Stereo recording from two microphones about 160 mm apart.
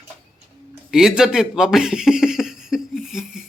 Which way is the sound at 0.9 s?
5° right (ahead or behind).